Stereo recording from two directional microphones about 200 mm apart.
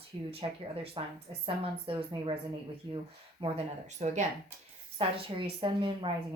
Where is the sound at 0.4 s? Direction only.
30° right (ahead or behind).